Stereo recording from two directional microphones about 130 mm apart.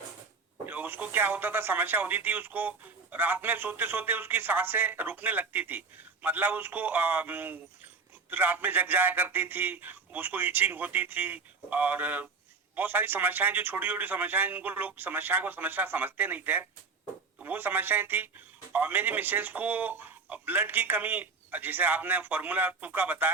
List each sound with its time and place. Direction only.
0.6 s speech: 15° right (ahead or behind)